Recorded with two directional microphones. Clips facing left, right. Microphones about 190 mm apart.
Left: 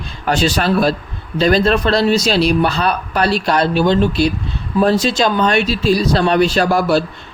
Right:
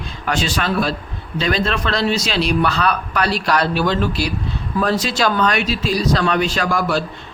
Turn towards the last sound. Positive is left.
turn(degrees=30)  # may be behind; listen again after turning